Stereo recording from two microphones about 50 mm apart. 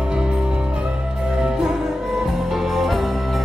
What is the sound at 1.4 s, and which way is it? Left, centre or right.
Music, centre.